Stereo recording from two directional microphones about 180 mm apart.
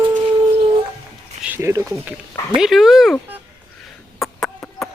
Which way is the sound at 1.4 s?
10° right (ahead or behind).